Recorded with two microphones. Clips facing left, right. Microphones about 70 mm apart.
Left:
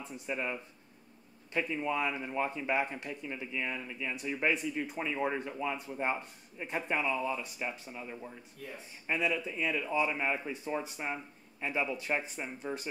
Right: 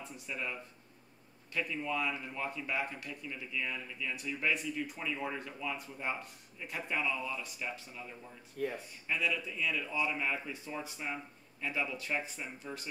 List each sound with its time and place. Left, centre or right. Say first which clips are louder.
0.0 s speech: left 4 dB; left
8.6 s speech: right 10 dB; right
9.0 s speech: left 3 dB; left